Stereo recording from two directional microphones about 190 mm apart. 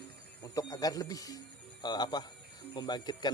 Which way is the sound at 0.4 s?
20° left (ahead or behind).